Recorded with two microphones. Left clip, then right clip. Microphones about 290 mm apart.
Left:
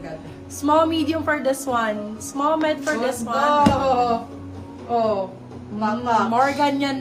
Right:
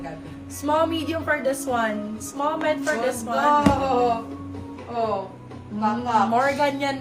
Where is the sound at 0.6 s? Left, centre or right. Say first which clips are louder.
Left 4 dB; centre.